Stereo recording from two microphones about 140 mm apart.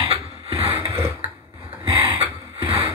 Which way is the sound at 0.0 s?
40° right (ahead or behind).